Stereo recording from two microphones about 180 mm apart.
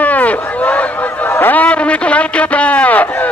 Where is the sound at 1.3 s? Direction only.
10° left (ahead or behind).